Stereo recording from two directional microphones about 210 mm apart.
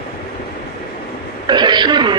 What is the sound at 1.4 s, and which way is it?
Speech, 20° right (ahead or behind).